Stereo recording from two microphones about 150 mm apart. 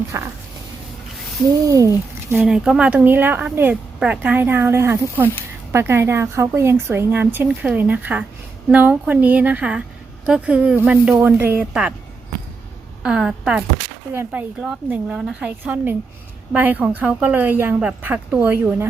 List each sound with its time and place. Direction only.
0.1 s speech: 20° right (ahead or behind)
1.6 s speech: 20° right (ahead or behind)
2.3 s speech: 5° right (ahead or behind)
13.0 s a woman's voice: 5° right (ahead or behind)